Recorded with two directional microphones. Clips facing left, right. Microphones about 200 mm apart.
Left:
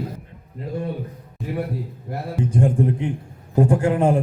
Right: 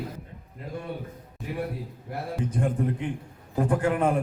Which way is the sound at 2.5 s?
30° left (ahead or behind).